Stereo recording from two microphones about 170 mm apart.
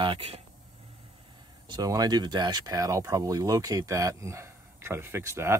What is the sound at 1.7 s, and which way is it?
Speech, 20° right (ahead or behind).